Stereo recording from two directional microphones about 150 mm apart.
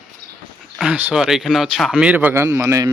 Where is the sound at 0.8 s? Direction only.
10° right (ahead or behind).